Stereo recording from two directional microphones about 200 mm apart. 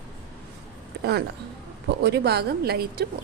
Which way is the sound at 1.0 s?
55° right (ahead or behind).